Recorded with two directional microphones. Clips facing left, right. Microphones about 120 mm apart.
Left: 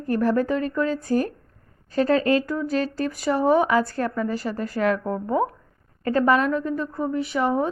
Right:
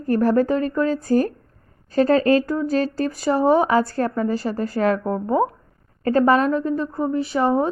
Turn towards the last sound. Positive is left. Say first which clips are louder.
# right 3 dB
turn(degrees=-35)  # may be behind; listen again after turning